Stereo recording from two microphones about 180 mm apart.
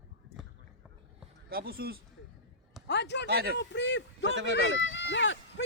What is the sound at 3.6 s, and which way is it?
Speech, 80° left.